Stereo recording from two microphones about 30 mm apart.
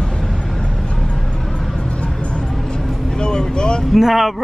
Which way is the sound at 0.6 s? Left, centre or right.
Left.